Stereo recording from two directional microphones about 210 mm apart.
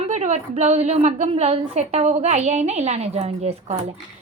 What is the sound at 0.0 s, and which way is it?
A woman's voice, 35° right (ahead or behind).